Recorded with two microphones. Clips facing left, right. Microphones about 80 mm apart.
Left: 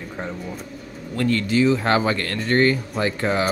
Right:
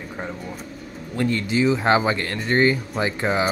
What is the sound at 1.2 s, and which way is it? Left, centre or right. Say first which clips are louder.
Speech: left 2 dB; centre.